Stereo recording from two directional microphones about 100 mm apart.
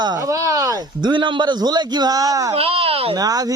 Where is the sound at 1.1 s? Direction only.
50° right (ahead or behind); by 2.5 s 35° right (ahead or behind).